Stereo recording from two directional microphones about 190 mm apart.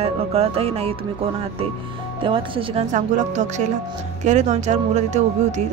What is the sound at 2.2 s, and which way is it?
Speech, 25° right (ahead or behind).